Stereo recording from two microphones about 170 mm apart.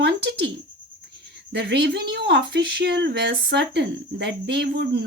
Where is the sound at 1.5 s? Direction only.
85° right.